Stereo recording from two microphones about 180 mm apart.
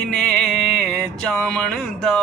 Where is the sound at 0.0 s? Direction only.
5° left (ahead or behind).